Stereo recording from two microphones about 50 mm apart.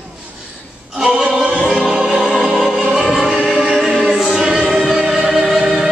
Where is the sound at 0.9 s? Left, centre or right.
Centre.